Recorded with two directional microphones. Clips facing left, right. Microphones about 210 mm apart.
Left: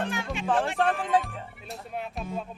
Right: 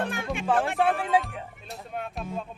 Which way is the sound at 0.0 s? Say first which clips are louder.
Right 1 dB; 55° right (ahead or behind).